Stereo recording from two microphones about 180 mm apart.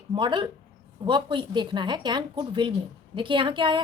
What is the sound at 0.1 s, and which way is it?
A woman's voice, 25° right (ahead or behind).